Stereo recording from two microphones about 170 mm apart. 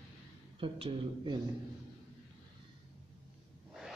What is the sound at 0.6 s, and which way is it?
Speech, 30° right (ahead or behind).